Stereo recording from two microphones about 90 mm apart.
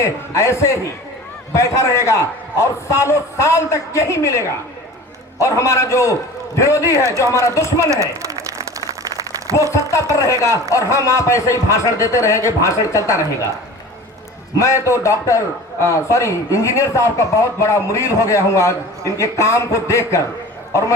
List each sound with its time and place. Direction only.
0.0 s a man's voice: 35° left (ahead or behind)
7.9 s speech: 35° right (ahead or behind)
9.7 s a man's voice: 35° left (ahead or behind)
14.6 s a man's voice: 35° left (ahead or behind)